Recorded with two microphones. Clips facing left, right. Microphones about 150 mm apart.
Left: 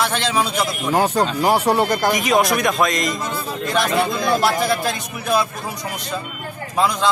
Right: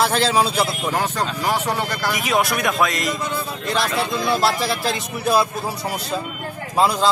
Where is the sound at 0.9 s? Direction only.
35° left (ahead or behind).